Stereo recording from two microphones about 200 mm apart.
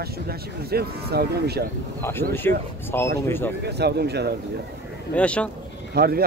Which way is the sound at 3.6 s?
55° right (ahead or behind).